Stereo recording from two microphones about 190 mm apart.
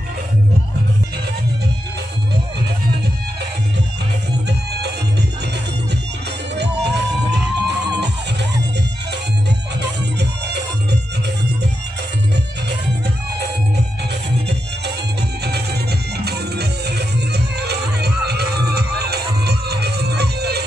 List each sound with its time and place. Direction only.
6.5 s music: 65° right (ahead or behind)
16.3 s music: 60° right (ahead or behind)